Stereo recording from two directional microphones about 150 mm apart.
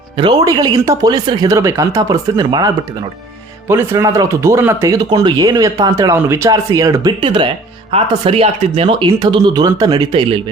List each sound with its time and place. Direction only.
0.2 s speech: 30° right (ahead or behind)